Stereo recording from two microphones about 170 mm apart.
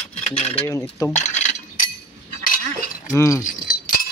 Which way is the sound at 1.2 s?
45° left (ahead or behind).